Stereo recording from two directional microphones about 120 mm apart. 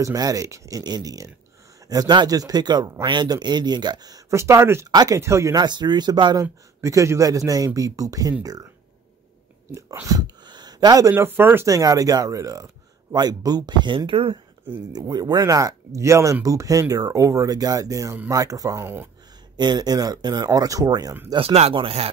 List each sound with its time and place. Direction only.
0.0 s speech: 30° right (ahead or behind)
6.4 s speech: 25° right (ahead or behind)
9.7 s speech: 25° right (ahead or behind)
11.7 s speech: 30° right (ahead or behind); by 14.4 s 45° right (ahead or behind)
14.9 s speech: 35° right (ahead or behind)
21.4 s speech: 55° right (ahead or behind)